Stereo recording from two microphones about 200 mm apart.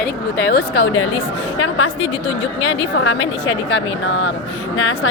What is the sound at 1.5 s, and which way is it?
Speech, 80° left.